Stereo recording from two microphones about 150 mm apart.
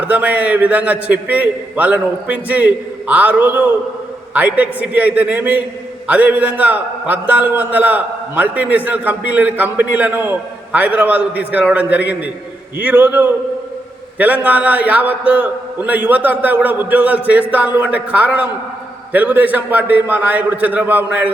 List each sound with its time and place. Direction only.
0.0 s a man's voice: 10° right (ahead or behind)